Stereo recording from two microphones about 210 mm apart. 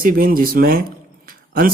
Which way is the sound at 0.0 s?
40° right (ahead or behind).